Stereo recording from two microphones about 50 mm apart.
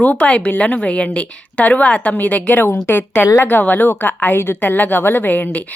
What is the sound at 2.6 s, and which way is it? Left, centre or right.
A woman's voice, left.